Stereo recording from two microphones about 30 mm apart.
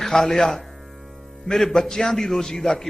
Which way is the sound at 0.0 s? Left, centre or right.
Centre.